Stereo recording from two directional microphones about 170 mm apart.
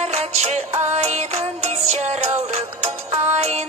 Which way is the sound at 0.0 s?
40° right (ahead or behind).